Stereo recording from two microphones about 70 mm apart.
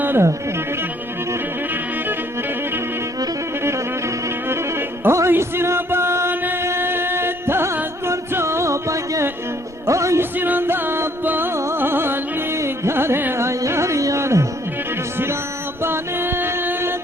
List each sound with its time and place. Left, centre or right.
0.0 s music: right
5.0 s music: right
10.3 s music: right
15.8 s music: right